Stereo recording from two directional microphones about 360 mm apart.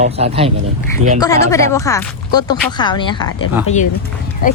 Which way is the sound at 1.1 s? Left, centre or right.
Centre.